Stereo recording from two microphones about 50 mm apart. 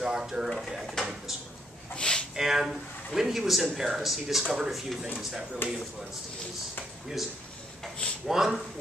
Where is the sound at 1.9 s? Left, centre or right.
Centre.